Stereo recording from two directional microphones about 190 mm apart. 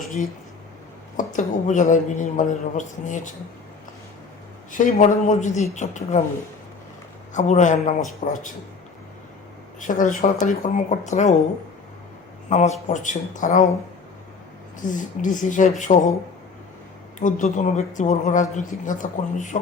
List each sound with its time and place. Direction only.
1.1 s a man's voice: 40° left (ahead or behind)
4.7 s a man's voice: 45° left (ahead or behind)
7.3 s a man's voice: 40° left (ahead or behind)
9.8 s a man's voice: 40° left (ahead or behind)
12.5 s a man's voice: 40° left (ahead or behind)
14.8 s a woman's voice: 45° left (ahead or behind)
17.2 s a man's voice: 40° left (ahead or behind)